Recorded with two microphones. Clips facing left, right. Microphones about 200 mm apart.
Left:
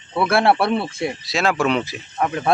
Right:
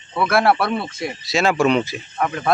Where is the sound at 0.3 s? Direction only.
30° left (ahead or behind).